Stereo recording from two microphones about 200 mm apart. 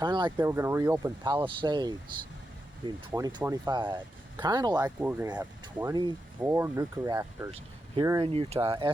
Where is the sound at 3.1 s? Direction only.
15° right (ahead or behind).